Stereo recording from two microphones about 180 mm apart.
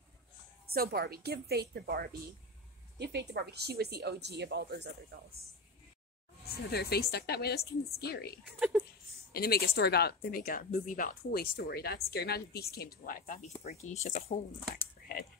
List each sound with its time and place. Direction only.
0.7 s a woman's voice: 60° right (ahead or behind)
3.0 s a woman's voice: 70° right (ahead or behind)
6.5 s speech: 65° left (ahead or behind)
8.5 s speech: 5° right (ahead or behind)
9.3 s speech: 60° left (ahead or behind)